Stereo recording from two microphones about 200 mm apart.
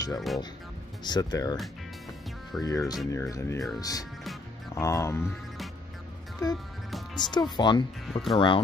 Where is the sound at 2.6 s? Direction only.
15° left (ahead or behind).